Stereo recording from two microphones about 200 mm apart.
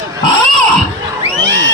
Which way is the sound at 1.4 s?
65° right (ahead or behind).